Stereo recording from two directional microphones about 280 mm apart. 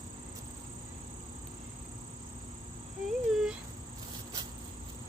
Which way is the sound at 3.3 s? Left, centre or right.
Centre.